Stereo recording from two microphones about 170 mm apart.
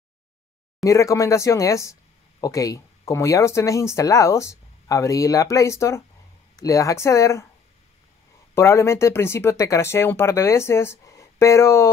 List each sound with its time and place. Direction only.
0.8 s speech: 20° left (ahead or behind)
8.5 s speech: 15° left (ahead or behind)